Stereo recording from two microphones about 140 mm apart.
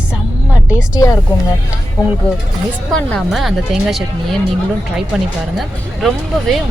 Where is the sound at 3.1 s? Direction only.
Centre (ahead or behind).